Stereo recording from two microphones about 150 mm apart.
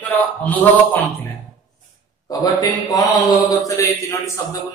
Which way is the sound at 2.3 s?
25° left (ahead or behind).